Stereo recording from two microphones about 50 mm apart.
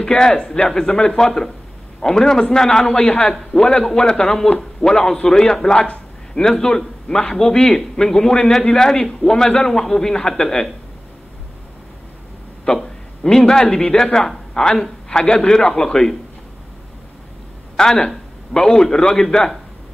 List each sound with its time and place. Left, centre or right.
0.0 s a man's voice: centre
12.6 s speech: centre
17.7 s a man's voice: centre